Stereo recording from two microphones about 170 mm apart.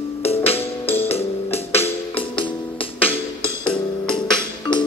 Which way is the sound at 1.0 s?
35° left (ahead or behind).